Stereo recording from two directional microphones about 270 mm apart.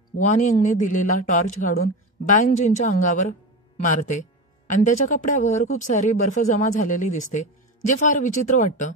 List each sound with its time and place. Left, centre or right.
0.3 s speech: left